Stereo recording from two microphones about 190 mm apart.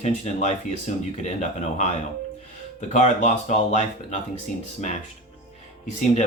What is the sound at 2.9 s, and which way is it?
Speech, 40° left (ahead or behind).